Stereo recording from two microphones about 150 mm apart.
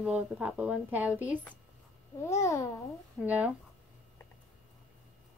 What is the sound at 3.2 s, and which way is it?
Speech, 10° right (ahead or behind).